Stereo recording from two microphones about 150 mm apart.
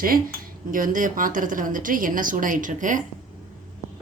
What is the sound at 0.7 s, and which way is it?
A woman's voice, 65° right (ahead or behind).